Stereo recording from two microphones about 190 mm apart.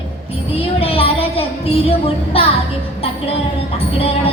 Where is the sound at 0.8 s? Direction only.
30° left (ahead or behind).